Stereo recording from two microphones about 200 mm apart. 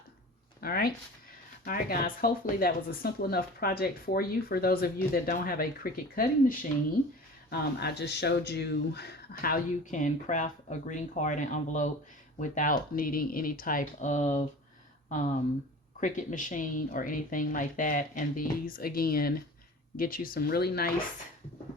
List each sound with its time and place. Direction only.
0.6 s a sound: 50° left (ahead or behind)
1.6 s speech: 45° left (ahead or behind)
7.5 s speech: 55° left (ahead or behind); by 14.4 s 35° left (ahead or behind)
16.0 s speech: 40° left (ahead or behind)